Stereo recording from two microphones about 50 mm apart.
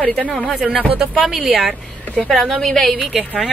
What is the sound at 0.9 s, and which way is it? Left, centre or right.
Speech, right.